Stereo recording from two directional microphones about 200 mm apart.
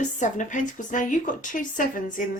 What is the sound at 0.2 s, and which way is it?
A woman's voice, 40° left (ahead or behind).